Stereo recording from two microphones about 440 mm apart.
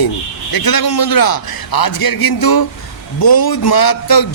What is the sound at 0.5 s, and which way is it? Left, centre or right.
A man's voice, left.